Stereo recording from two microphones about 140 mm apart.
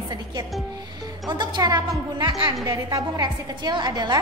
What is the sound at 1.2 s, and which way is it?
A woman's voice, 30° right (ahead or behind).